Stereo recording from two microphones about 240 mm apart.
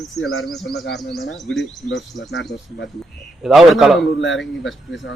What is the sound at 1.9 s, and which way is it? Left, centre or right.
Speech, left.